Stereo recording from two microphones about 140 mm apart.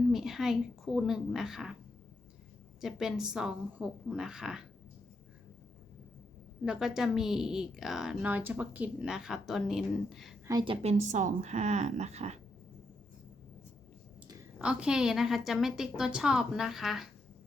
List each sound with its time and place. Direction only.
0.1 s speech: centre (ahead or behind)
2.8 s speech: 5° right (ahead or behind)
6.7 s speech: 5° right (ahead or behind)
10.6 s a woman's voice: 40° right (ahead or behind)
11.0 s a woman's voice: 60° right (ahead or behind)
14.6 s speech: 5° right (ahead or behind)